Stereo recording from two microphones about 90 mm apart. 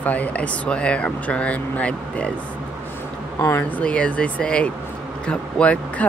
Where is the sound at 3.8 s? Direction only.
10° left (ahead or behind).